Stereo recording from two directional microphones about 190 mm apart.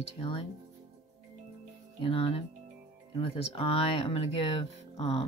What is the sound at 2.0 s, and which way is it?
Speech, 30° left (ahead or behind).